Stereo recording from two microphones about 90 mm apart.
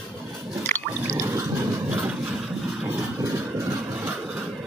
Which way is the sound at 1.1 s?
35° right (ahead or behind).